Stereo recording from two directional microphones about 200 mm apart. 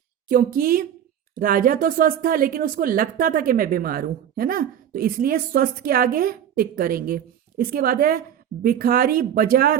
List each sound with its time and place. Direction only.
0.3 s speech: 45° right (ahead or behind)